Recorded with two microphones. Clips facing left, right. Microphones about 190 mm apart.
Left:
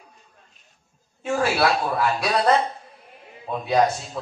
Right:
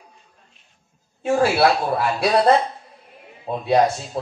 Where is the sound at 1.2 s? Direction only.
30° right (ahead or behind).